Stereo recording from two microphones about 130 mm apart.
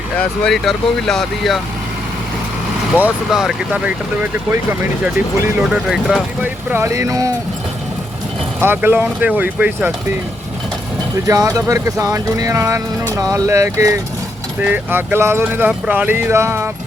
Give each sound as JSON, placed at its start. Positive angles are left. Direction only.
{"t": 0.2, "sound": "speech", "side_deg": 5}
{"t": 2.9, "sound": "speech", "side_deg": -5}
{"t": 5.6, "sound": "speech", "side_deg": -5}
{"t": 6.4, "sound": "speech", "side_deg": -15}
{"t": 8.6, "sound": "speech", "side_deg": -15}
{"t": 11.3, "sound": "speech", "side_deg": -25}